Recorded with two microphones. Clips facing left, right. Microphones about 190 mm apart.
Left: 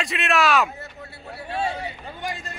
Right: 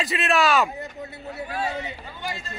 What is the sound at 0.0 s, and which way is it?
Speech, centre (ahead or behind).